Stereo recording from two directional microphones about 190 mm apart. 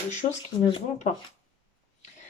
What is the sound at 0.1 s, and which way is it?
Speech, 35° left (ahead or behind).